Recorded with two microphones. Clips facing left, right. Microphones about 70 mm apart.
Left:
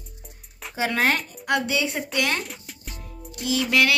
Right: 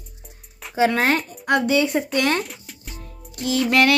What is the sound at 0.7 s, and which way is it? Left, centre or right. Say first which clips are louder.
A woman's voice: right 4 dB; right.